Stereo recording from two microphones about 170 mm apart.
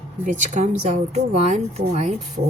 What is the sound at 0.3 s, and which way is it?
A woman's voice, 50° right (ahead or behind).